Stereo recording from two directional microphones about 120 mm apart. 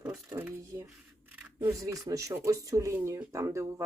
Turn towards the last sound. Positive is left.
turn(degrees=-25)  # may be behind; listen again after turning